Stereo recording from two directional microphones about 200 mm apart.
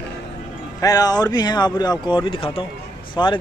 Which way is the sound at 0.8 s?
20° left (ahead or behind).